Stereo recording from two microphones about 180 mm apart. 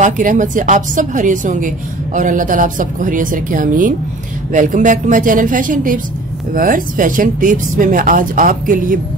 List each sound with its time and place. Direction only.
0.0 s speech: 45° right (ahead or behind)